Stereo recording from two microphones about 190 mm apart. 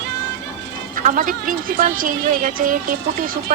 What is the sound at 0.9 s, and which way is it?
A woman's voice, 40° right (ahead or behind).